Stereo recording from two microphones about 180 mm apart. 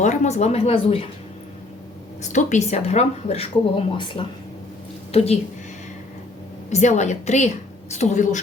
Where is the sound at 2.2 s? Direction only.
40° left (ahead or behind).